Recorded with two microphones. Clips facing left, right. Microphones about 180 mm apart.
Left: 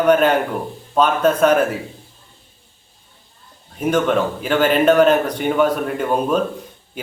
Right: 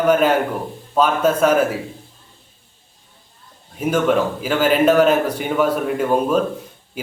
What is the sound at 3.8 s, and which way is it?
A man's voice, 5° right (ahead or behind).